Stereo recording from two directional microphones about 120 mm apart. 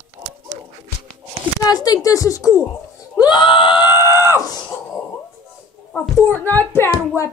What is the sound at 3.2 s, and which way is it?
A child's voice, 40° left (ahead or behind).